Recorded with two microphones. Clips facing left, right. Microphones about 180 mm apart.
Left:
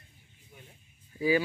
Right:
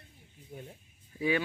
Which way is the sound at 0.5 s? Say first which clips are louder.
Right 9 dB; 40° right (ahead or behind).